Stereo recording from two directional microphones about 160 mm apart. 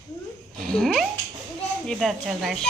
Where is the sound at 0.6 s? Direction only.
5° left (ahead or behind).